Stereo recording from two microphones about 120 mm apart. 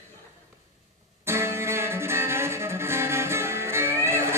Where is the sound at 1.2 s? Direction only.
20° right (ahead or behind).